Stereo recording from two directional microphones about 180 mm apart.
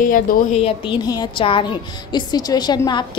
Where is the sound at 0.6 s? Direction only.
30° left (ahead or behind).